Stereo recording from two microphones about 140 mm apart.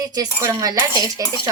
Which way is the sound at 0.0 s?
25° right (ahead or behind).